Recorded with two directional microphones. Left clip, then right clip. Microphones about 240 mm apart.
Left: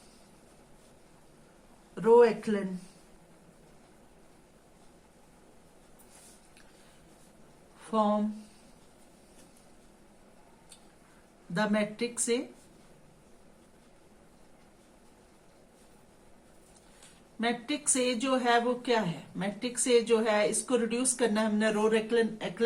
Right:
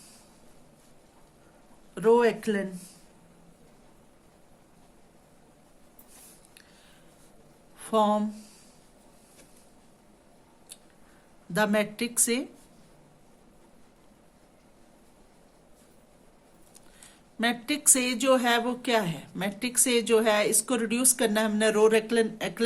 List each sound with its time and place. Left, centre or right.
2.0 s a woman's voice: right
7.8 s speech: right
11.5 s a woman's voice: right
17.4 s a woman's voice: right